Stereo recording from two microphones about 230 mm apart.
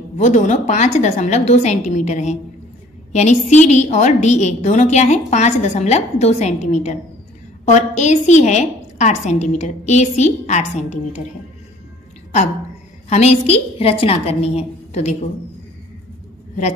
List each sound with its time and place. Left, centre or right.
0.2 s a woman's voice: left
13.1 s a woman's voice: left